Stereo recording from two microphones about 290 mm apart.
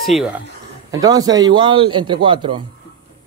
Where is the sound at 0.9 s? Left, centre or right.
Centre.